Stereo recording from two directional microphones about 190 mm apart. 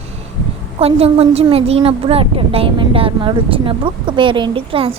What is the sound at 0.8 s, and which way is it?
A woman's voice, 30° right (ahead or behind).